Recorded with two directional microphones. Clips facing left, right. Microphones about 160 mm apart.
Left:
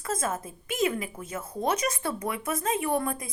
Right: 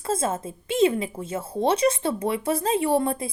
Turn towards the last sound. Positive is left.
turn(degrees=-30)  # may be behind; listen again after turning